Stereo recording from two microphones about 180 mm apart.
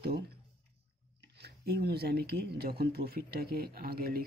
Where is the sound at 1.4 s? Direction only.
60° right (ahead or behind).